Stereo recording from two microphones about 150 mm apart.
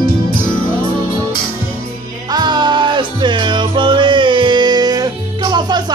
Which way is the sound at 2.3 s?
30° right (ahead or behind).